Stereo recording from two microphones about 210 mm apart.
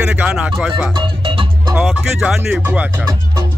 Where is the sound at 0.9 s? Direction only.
25° right (ahead or behind).